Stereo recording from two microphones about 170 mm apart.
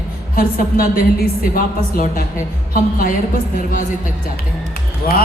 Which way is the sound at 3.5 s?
55° left (ahead or behind).